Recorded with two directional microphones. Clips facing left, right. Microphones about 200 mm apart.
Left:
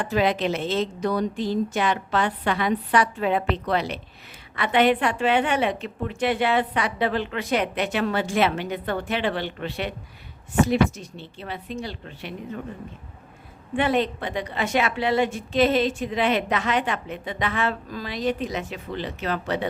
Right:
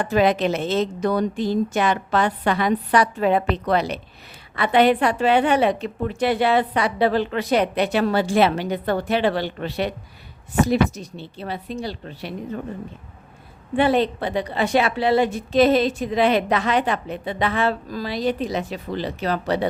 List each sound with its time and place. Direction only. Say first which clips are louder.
0.0 s a woman's voice: right 4 dB; 45° right (ahead or behind)
13.7 s a woman's voice: right 4 dB; 35° right (ahead or behind)